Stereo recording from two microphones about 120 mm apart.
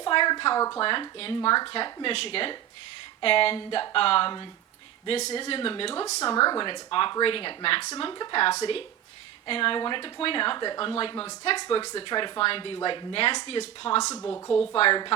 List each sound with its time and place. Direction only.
0.0 s speech: 40° left (ahead or behind)
6.3 s speech: 35° left (ahead or behind)
11.5 s speech: 35° left (ahead or behind)
14.2 s a woman's voice: 25° left (ahead or behind)
14.7 s speech: 50° left (ahead or behind)